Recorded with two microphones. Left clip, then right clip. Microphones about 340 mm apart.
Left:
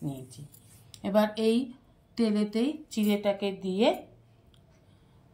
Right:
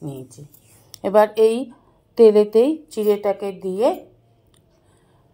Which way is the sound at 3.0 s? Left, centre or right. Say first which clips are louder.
Right 9 dB; right.